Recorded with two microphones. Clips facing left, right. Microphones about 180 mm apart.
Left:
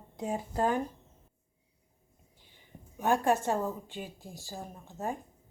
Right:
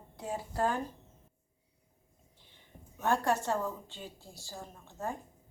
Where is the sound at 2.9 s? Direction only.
15° left (ahead or behind).